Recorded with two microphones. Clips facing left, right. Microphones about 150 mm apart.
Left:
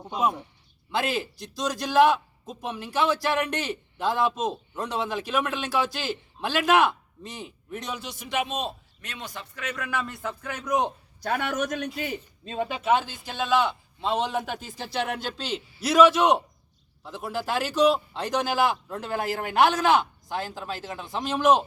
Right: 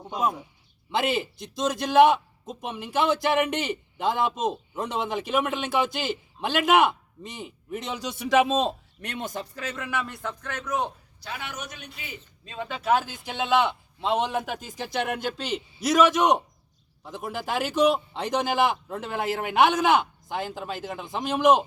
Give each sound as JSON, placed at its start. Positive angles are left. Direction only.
{"t": 0.9, "sound": "a man's voice", "side_deg": -20}
{"t": 8.2, "sound": "a man's voice", "side_deg": -90}
{"t": 10.0, "sound": "speech", "side_deg": 0}
{"t": 11.2, "sound": "a man's voice", "side_deg": 50}
{"t": 12.6, "sound": "speech", "side_deg": 5}
{"t": 13.2, "sound": "a man's voice", "side_deg": -20}